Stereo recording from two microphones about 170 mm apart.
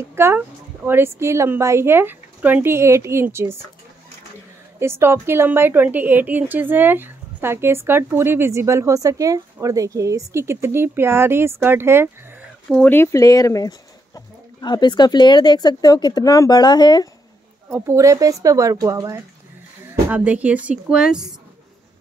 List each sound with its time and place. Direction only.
0.1 s a woman's voice: 15° right (ahead or behind)
4.7 s a woman's voice: 15° right (ahead or behind)
12.6 s speech: 5° left (ahead or behind); by 17.1 s 25° left (ahead or behind)
17.6 s a woman's voice: 10° right (ahead or behind)